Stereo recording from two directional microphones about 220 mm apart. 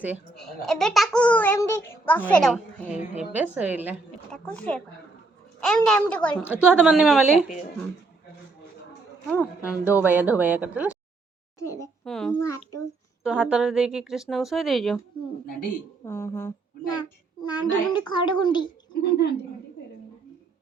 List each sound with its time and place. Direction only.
0.0 s a child's voice: centre (ahead or behind)
4.3 s a child's voice: 5° left (ahead or behind)
6.5 s a child's voice: 5° right (ahead or behind)
7.3 s speech: 30° left (ahead or behind)
9.3 s a woman's voice: 10° left (ahead or behind)
9.9 s speech: 10° right (ahead or behind)
11.6 s a woman's voice: 15° left (ahead or behind)
12.0 s a child's voice: 5° left (ahead or behind)
12.4 s a woman's voice: 15° left (ahead or behind)
13.2 s a child's voice: 5° right (ahead or behind)
16.0 s a child's voice: 10° left (ahead or behind)